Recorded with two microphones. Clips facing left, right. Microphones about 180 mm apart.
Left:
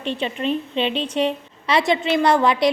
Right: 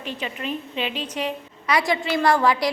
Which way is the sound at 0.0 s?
30° left (ahead or behind).